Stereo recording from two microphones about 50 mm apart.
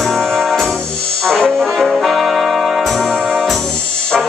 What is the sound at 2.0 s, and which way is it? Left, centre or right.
Music, centre.